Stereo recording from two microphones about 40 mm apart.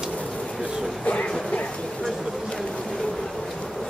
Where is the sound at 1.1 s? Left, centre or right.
Left.